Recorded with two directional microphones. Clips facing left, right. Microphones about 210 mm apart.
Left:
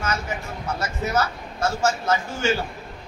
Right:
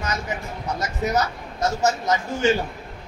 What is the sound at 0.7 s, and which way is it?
A man's voice, 15° right (ahead or behind).